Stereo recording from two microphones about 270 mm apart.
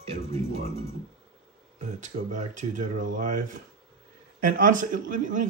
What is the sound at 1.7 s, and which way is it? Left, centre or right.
Speech, right.